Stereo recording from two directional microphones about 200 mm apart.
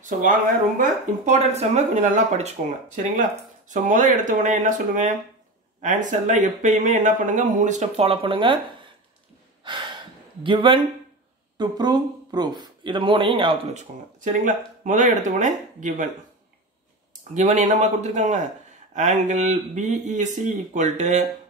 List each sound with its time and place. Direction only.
0.0 s speech: 40° right (ahead or behind)
3.7 s speech: 40° right (ahead or behind)
10.4 s speech: 25° right (ahead or behind)
14.2 s speech: 40° right (ahead or behind)
17.3 s speech: 35° right (ahead or behind)